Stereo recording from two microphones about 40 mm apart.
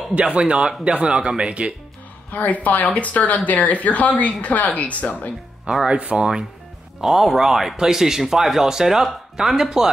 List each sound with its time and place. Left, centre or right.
0.1 s a man's voice: right
2.3 s speech: left
5.9 s speech: right
6.1 s speech: centre
7.0 s speech: centre